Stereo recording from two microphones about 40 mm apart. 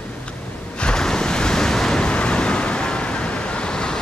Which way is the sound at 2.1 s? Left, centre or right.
Left.